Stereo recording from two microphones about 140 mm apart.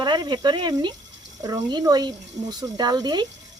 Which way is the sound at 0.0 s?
30° right (ahead or behind).